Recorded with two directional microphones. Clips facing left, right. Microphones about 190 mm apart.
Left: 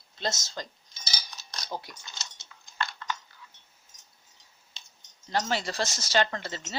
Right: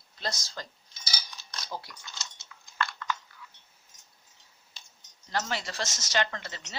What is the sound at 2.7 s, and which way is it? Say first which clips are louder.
Chewing: right 1 dB; 25° left (ahead or behind).